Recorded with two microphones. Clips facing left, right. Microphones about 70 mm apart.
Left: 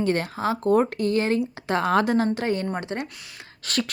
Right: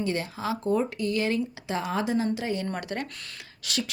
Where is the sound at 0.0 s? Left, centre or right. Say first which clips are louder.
Left 5 dB; left.